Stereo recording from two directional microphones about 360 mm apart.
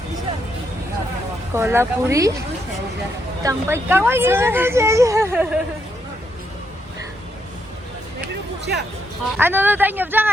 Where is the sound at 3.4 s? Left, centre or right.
Centre.